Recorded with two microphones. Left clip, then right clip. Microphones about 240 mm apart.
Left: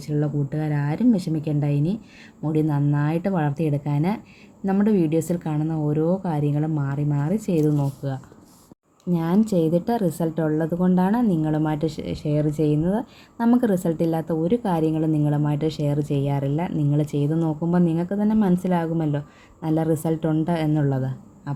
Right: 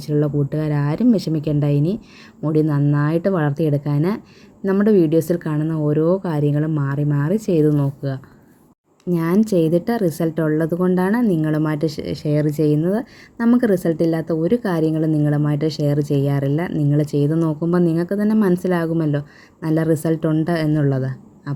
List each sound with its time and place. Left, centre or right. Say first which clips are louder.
0.0 s a woman's voice: right 6 dB; centre